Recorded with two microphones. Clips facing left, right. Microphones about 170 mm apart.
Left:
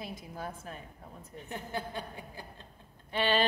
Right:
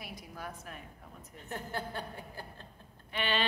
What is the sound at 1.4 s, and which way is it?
A woman's voice, 15° left (ahead or behind).